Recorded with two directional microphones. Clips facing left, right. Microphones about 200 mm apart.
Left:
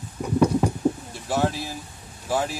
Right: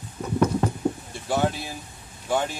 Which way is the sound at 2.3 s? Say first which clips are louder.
Even; 5° left (ahead or behind).